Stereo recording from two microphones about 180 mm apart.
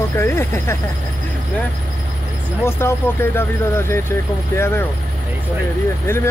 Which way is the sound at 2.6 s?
15° left (ahead or behind).